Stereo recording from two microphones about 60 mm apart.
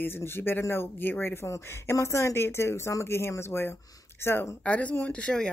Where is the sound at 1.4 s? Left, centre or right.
Left.